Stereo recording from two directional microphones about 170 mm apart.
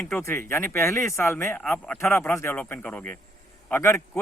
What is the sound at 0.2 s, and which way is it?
Speech, 15° left (ahead or behind).